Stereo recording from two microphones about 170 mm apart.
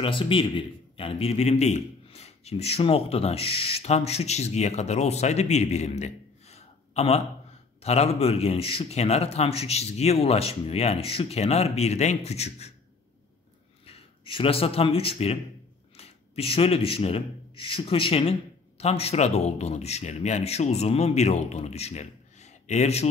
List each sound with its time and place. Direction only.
0.0 s a man's voice: 30° left (ahead or behind)
13.8 s a man's voice: 35° left (ahead or behind)